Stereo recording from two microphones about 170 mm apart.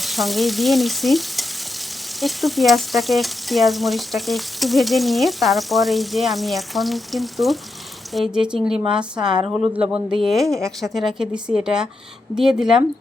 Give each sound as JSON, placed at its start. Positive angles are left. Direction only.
{"t": 0.0, "sound": "stir", "side_deg": 0}
{"t": 2.2, "sound": "frying", "side_deg": 0}
{"t": 9.4, "sound": "speech", "side_deg": -10}
{"t": 9.9, "sound": "frying", "side_deg": -5}